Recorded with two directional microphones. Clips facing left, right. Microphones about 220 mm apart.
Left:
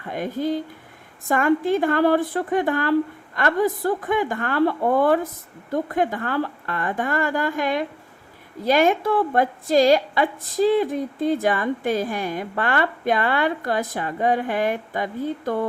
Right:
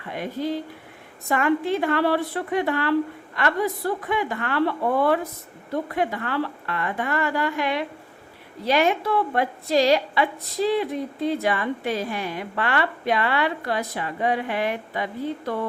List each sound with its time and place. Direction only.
0.1 s a woman's voice: 45° left (ahead or behind)